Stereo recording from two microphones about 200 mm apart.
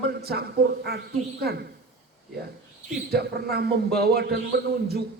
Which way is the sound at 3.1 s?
50° right (ahead or behind).